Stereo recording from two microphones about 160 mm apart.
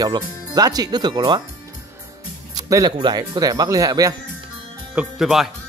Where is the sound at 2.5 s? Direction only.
25° right (ahead or behind).